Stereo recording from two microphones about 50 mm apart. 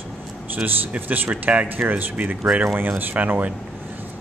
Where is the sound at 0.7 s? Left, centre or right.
Right.